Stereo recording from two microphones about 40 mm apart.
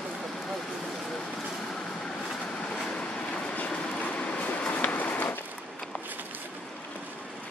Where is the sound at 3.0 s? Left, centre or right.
Left.